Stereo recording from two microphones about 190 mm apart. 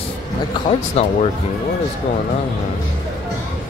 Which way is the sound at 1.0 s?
35° left (ahead or behind).